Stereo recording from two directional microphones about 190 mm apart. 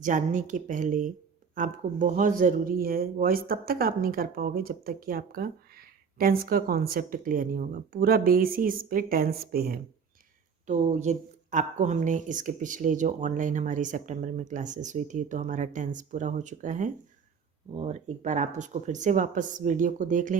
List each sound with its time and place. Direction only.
0.0 s speech: 40° right (ahead or behind)
10.7 s speech: 40° right (ahead or behind)